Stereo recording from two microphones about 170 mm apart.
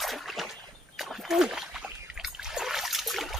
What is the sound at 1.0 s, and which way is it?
Splash, centre (ahead or behind).